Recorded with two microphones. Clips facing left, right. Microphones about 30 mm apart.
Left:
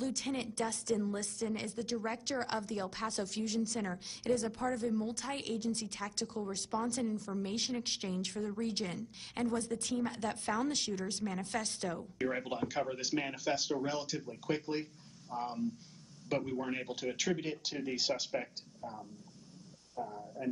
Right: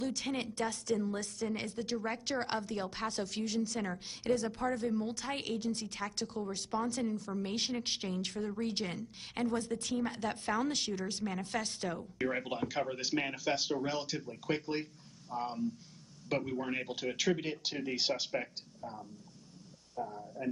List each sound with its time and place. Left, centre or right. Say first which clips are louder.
0.0 s a woman's voice: right 1 dB; centre